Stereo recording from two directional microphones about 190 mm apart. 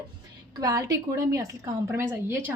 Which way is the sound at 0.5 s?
20° right (ahead or behind).